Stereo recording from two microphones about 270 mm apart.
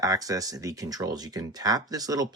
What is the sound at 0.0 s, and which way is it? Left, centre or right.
Speech, centre.